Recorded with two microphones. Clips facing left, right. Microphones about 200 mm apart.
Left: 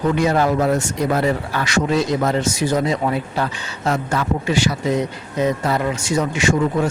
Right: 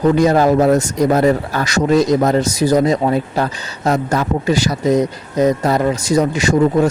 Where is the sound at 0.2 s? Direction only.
40° right (ahead or behind).